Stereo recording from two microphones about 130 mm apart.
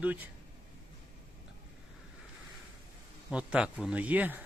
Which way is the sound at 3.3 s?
10° right (ahead or behind).